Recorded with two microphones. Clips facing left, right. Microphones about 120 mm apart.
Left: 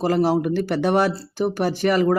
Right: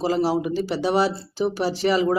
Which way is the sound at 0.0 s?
55° left (ahead or behind).